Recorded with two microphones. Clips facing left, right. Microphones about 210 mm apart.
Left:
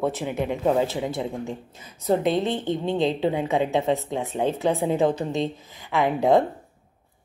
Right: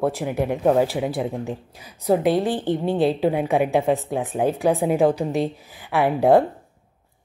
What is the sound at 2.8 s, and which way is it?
Speech, 20° left (ahead or behind).